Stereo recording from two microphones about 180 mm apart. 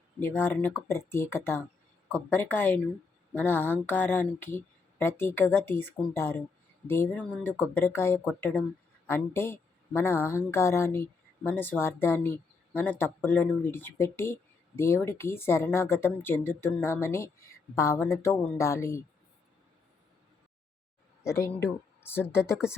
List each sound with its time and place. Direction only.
0.2 s speech: 10° left (ahead or behind)
21.2 s speech: 15° left (ahead or behind)